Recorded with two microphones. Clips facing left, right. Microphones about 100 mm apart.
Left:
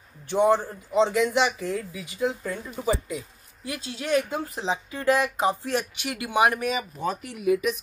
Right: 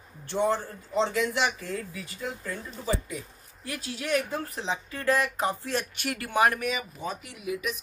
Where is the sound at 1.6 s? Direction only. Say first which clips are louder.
Left 5 dB; 15° left (ahead or behind).